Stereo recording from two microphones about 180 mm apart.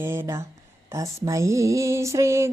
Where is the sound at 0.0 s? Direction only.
15° right (ahead or behind).